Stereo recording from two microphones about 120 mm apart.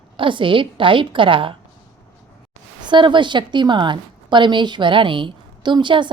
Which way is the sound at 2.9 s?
40° right (ahead or behind).